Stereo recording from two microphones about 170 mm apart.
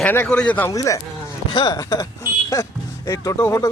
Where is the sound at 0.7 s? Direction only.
20° left (ahead or behind).